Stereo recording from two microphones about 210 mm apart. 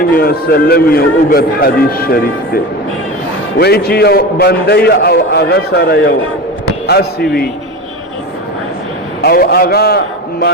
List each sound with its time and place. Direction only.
0.1 s a man's voice: 45° left (ahead or behind)
3.6 s a man's voice: 50° left (ahead or behind)
9.2 s a man's voice: 45° left (ahead or behind)